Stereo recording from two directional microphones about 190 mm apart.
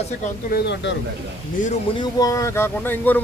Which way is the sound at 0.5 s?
65° left (ahead or behind).